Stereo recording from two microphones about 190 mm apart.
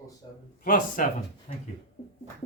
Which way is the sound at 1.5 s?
35° left (ahead or behind).